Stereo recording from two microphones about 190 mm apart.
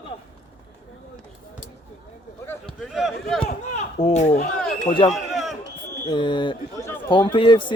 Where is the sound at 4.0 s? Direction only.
35° left (ahead or behind).